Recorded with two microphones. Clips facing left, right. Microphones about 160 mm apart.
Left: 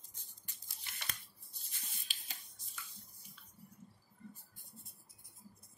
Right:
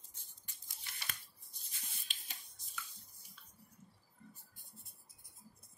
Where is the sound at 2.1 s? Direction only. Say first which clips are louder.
Even; centre (ahead or behind).